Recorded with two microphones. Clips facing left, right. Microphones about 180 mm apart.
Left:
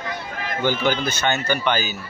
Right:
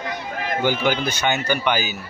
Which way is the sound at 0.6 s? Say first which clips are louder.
Even; 10° right (ahead or behind).